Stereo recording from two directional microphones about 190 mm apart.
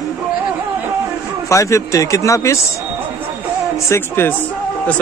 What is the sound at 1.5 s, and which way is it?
Speech, 15° left (ahead or behind).